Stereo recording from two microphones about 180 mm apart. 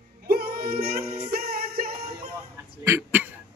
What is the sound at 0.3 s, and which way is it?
Music, 60° right (ahead or behind).